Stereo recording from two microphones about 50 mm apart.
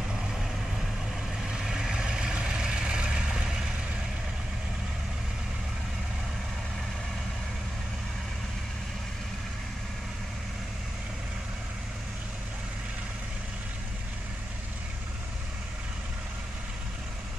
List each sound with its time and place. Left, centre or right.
1.5 s vehicle: centre